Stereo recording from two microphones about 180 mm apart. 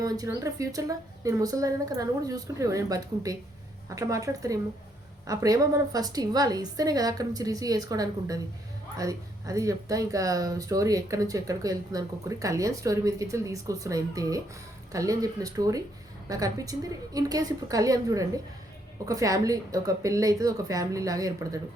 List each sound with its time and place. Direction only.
0.0 s speech: 20° right (ahead or behind)